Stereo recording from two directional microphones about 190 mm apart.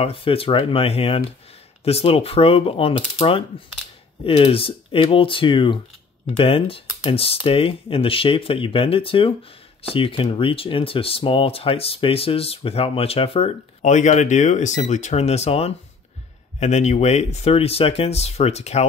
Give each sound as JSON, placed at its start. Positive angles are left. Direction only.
{"t": 0.0, "sound": "speech", "side_deg": 30}